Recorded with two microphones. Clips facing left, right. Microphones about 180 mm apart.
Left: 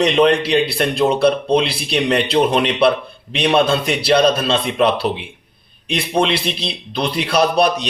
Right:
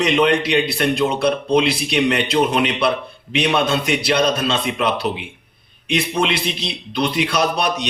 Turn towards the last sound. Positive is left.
turn(degrees=30)  # may be behind; listen again after turning